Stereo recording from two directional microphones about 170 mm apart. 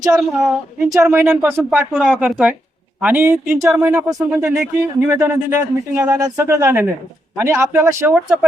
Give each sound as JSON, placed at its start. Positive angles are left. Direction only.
{"t": 0.0, "sound": "speech", "side_deg": -15}
{"t": 2.0, "sound": "speech", "side_deg": -5}